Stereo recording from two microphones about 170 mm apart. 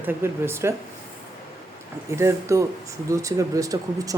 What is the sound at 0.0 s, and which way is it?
Speech, 10° right (ahead or behind).